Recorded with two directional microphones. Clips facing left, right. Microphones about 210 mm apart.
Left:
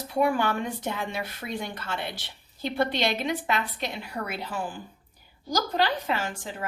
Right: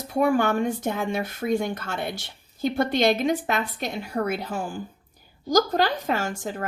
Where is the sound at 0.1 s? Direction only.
45° right (ahead or behind).